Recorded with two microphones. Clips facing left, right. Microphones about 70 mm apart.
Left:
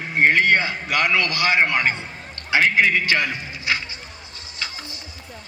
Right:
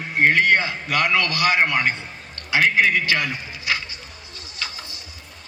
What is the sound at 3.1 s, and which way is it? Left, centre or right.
Speech, left.